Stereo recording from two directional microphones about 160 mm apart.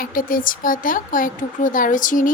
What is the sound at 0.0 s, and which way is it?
Speech, 60° left (ahead or behind).